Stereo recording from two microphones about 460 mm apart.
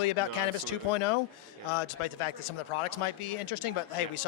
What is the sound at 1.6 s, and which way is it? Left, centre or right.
Speech, left.